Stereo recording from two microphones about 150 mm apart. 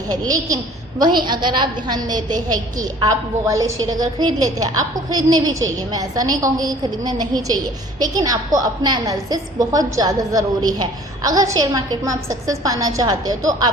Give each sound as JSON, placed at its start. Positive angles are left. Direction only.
{"t": 0.3, "sound": "a woman's voice", "side_deg": -25}